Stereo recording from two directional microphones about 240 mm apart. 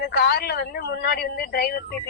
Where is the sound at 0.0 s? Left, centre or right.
Left.